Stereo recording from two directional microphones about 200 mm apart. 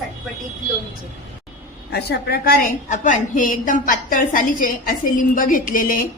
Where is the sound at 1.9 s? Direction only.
55° left (ahead or behind).